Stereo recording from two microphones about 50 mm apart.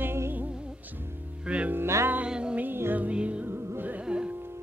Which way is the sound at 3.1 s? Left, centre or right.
Right.